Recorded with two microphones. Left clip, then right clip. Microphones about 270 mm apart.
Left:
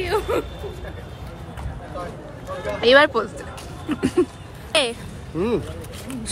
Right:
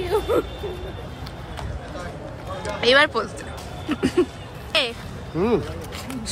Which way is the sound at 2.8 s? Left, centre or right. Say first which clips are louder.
Left 2 dB; centre.